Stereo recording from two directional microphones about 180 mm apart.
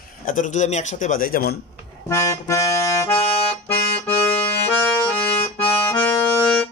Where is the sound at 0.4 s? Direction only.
45° left (ahead or behind).